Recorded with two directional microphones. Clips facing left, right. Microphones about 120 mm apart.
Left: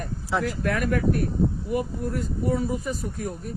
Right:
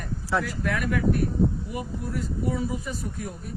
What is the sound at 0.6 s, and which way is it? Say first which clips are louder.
Speech: left 2 dB; 45° left (ahead or behind).